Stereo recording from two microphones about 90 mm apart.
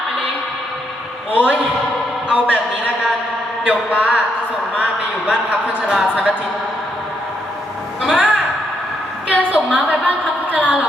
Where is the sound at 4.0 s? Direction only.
15° right (ahead or behind).